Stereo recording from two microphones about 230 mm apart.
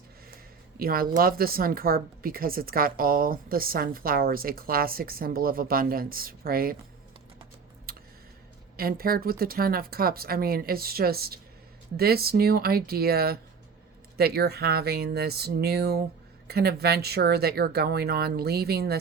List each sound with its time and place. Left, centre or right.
0.8 s speech: right
7.9 s tick: right
8.7 s speech: right